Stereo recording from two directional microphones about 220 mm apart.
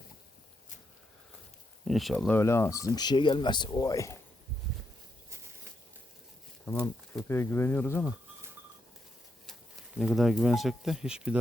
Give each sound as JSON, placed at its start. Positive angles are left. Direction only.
{"t": 1.9, "sound": "speech", "side_deg": 0}
{"t": 6.8, "sound": "speech", "side_deg": 10}
{"t": 10.0, "sound": "speech", "side_deg": 0}